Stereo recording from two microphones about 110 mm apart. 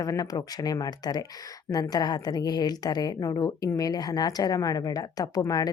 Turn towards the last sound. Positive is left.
turn(degrees=35)  # may be behind; listen again after turning